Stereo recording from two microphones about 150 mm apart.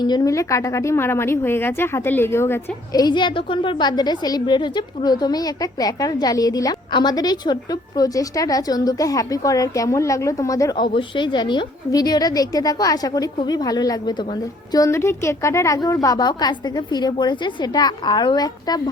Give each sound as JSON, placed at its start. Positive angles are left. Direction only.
{"t": 0.0, "sound": "a woman's voice", "side_deg": 25}